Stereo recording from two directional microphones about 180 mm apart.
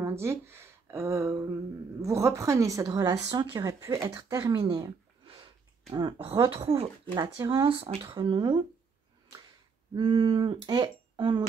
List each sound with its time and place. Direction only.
0.0 s speech: 15° right (ahead or behind)
5.2 s a sound: 30° right (ahead or behind)
5.9 s speech: 25° right (ahead or behind)
9.9 s speech: 25° right (ahead or behind)